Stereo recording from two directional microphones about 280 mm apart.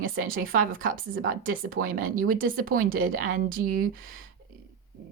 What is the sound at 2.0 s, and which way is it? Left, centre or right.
Speech, right.